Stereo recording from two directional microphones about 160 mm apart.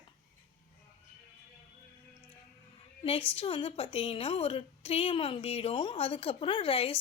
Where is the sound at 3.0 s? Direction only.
35° left (ahead or behind).